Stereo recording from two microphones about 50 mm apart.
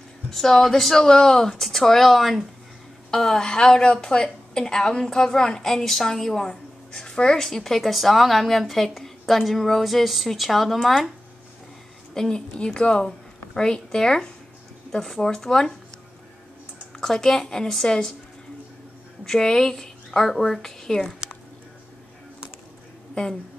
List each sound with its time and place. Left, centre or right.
0.3 s a woman's voice: centre
12.1 s a woman's voice: centre
16.9 s a woman's voice: centre
19.2 s a woman's voice: centre